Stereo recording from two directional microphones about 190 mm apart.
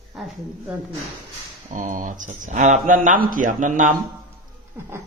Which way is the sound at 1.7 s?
45° right (ahead or behind).